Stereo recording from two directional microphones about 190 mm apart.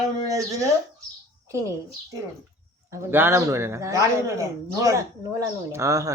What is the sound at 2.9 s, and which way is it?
Speech, 15° right (ahead or behind).